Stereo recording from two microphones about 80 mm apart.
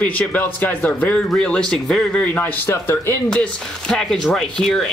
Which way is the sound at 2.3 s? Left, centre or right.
Left.